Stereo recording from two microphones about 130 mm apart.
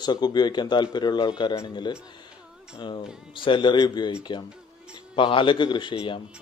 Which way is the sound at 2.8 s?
35° left (ahead or behind).